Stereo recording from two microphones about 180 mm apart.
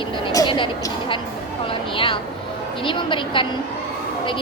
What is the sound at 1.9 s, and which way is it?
A woman's voice, 30° left (ahead or behind).